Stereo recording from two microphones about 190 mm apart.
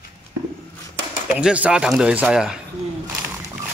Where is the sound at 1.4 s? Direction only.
5° right (ahead or behind).